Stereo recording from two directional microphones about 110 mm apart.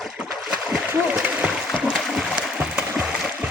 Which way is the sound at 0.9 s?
15° right (ahead or behind).